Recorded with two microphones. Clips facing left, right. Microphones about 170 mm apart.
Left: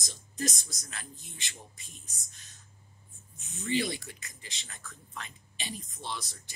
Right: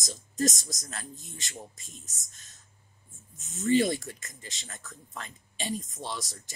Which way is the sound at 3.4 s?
45° right (ahead or behind).